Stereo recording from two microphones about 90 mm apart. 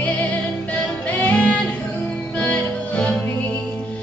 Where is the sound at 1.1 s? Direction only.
15° left (ahead or behind).